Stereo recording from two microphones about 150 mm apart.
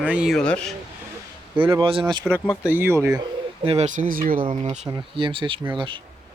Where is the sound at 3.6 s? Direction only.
50° right (ahead or behind); by 4.4 s 70° right (ahead or behind).